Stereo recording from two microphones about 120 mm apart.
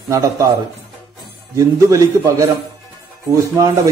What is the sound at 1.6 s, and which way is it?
Speech, 25° right (ahead or behind).